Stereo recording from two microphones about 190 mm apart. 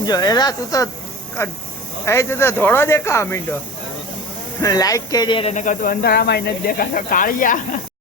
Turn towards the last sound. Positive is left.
turn(degrees=45)  # may be behind; listen again after turning